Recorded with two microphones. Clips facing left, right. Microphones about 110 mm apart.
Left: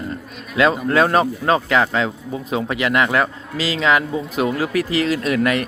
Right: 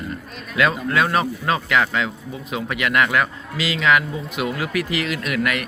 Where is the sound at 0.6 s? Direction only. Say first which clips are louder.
Left 4 dB; 30° left (ahead or behind).